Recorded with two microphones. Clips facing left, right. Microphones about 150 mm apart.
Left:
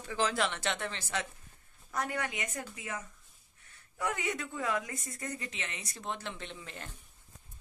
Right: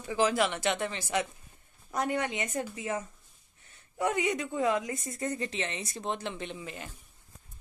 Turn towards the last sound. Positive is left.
turn(degrees=-10)  # may be behind; listen again after turning